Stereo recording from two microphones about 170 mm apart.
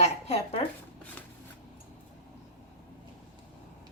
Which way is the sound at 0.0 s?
40° left (ahead or behind).